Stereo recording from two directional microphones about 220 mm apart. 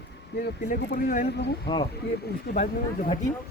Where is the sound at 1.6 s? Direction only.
20° left (ahead or behind).